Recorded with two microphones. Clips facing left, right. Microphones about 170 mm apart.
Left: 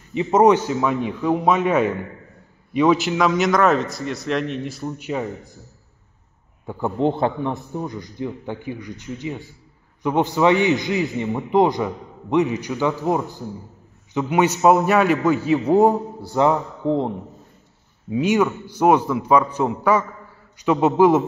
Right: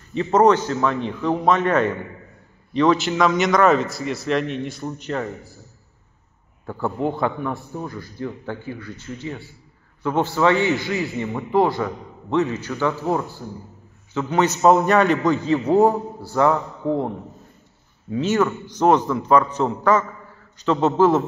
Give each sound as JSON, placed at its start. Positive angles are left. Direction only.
{"t": 0.1, "sound": "a man's voice", "side_deg": 10}
{"t": 6.6, "sound": "a man's voice", "side_deg": 15}
{"t": 7.0, "sound": "a man's voice", "side_deg": 25}
{"t": 18.1, "sound": "a man's voice", "side_deg": 10}